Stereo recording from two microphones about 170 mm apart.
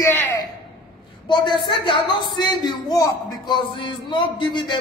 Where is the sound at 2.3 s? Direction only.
25° left (ahead or behind).